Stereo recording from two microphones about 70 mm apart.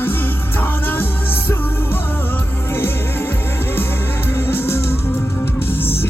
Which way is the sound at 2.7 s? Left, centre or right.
Left.